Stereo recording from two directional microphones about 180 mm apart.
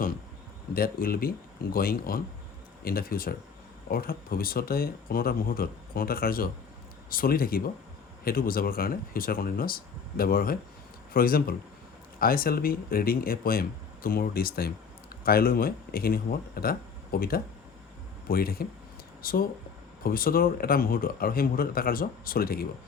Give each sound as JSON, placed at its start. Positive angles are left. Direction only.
{"t": 0.7, "sound": "speech", "side_deg": 55}